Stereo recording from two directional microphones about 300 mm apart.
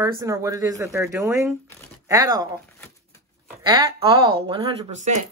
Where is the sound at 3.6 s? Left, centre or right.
Centre.